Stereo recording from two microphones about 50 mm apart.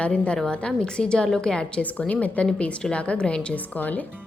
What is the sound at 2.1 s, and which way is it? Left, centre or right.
Speech, left.